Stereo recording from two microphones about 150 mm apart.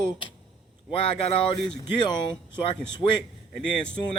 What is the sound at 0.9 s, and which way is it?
Speech, 35° left (ahead or behind).